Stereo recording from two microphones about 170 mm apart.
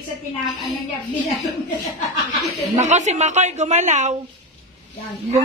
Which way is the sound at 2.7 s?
45° right (ahead or behind).